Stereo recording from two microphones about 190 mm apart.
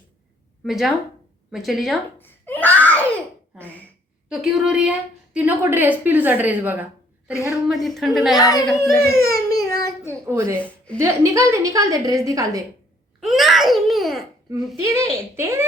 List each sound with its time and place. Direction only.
0.6 s speech: centre (ahead or behind)
2.1 s a sound: 10° left (ahead or behind)
3.6 s speech: 10° left (ahead or behind)
4.3 s a woman's voice: centre (ahead or behind)
7.9 s speech: centre (ahead or behind)
8.4 s speech: 20° left (ahead or behind)
8.6 s speech: centre (ahead or behind)
9.0 s baby cry: 15° left (ahead or behind)
10.2 s a woman's voice: 15° right (ahead or behind)
13.1 s babbling: centre (ahead or behind)
14.8 s a woman's voice: 15° right (ahead or behind)